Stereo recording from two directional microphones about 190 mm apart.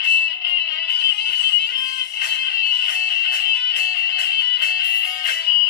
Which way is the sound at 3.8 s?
55° left (ahead or behind).